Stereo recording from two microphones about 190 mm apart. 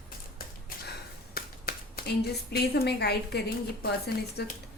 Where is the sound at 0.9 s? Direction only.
55° left (ahead or behind).